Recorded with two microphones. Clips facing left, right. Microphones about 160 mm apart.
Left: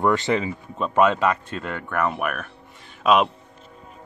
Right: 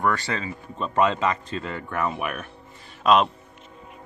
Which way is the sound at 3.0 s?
5° left (ahead or behind).